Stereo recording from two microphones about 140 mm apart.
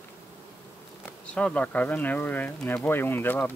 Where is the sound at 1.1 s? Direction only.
10° left (ahead or behind).